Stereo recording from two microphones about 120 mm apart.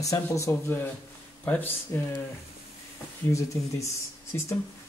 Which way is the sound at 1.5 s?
10° left (ahead or behind).